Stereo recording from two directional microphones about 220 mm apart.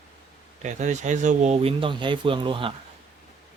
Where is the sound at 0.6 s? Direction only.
35° right (ahead or behind).